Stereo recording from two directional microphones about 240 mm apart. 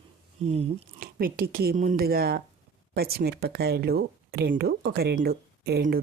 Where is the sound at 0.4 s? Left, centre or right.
Right.